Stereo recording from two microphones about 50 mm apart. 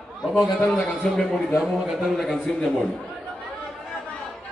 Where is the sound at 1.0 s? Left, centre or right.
Centre.